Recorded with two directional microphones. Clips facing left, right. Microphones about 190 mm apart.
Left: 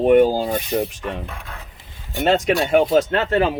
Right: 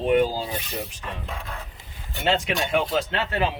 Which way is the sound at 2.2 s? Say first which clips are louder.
Left 6 dB; 45° left (ahead or behind).